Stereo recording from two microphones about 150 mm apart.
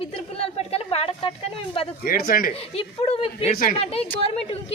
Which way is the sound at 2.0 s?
80° left.